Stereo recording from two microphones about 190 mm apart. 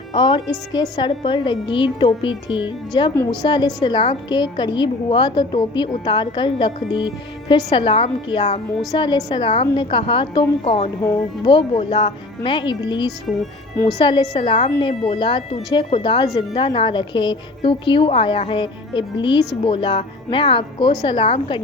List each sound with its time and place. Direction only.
0.1 s a woman's voice: 25° left (ahead or behind)